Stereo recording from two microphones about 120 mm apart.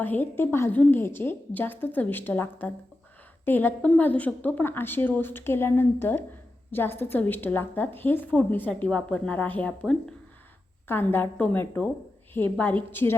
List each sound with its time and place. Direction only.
0.0 s a woman's voice: 15° left (ahead or behind)